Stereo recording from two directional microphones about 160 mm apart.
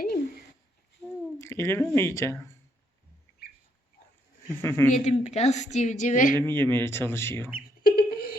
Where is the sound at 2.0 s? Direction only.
15° left (ahead or behind).